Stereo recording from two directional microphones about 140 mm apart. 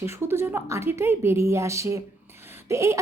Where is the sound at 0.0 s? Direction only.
20° right (ahead or behind).